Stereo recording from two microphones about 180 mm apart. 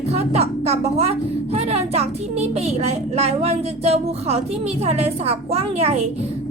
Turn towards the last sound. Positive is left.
turn(degrees=-35)  # may be behind; listen again after turning